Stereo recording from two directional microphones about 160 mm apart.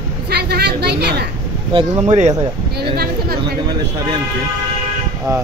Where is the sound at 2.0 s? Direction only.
45° right (ahead or behind).